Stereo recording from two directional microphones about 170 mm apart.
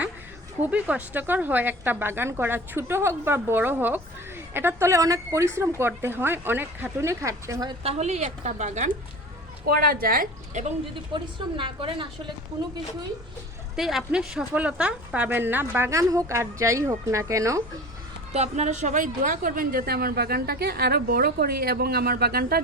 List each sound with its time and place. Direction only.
0.6 s a woman's voice: 10° right (ahead or behind)
7.9 s a woman's voice: 40° right (ahead or behind)
9.6 s a woman's voice: 60° right (ahead or behind); by 10.8 s 45° right (ahead or behind)
11.1 s a woman's voice: 30° right (ahead or behind)
13.7 s a woman's voice: centre (ahead or behind); by 17.6 s 20° right (ahead or behind)
18.3 s a woman's voice: 45° right (ahead or behind); by 22.6 s 65° right (ahead or behind)